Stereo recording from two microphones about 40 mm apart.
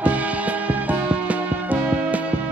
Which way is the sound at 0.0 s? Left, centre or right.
Right.